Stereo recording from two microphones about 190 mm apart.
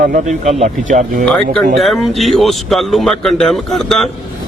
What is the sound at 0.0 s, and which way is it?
Speech, 45° right (ahead or behind).